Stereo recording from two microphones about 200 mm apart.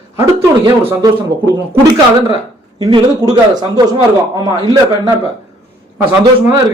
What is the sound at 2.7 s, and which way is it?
A man's voice, 20° right (ahead or behind).